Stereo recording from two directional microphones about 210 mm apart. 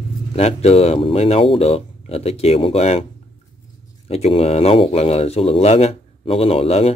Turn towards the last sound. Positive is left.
turn(degrees=30)  # may be behind; listen again after turning